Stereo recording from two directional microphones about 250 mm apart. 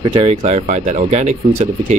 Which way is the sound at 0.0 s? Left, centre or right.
Centre.